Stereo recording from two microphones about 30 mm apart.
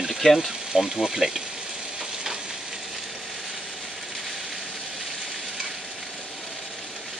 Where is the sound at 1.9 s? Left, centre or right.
Centre.